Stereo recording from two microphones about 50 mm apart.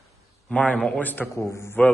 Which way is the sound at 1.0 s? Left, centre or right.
Left.